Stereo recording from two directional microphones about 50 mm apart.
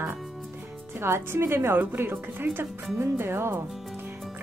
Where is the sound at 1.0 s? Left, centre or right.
Right.